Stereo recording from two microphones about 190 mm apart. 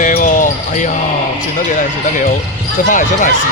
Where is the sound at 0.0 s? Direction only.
40° left (ahead or behind).